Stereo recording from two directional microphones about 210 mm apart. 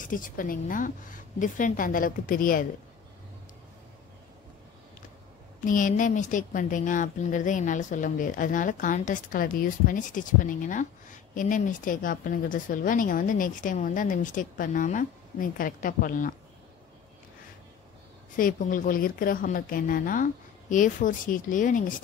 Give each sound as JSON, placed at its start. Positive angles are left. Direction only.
{"t": 0.0, "sound": "a woman's voice", "side_deg": 40}
{"t": 5.6, "sound": "a woman's voice", "side_deg": 40}
{"t": 18.3, "sound": "a woman's voice", "side_deg": 40}